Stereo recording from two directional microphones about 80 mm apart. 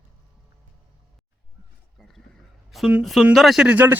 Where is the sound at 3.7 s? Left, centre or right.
Right.